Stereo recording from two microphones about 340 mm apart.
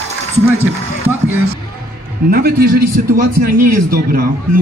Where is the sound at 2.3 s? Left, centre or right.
Right.